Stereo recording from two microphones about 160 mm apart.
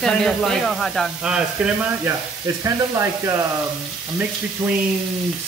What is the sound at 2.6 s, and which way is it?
Speech, 15° right (ahead or behind).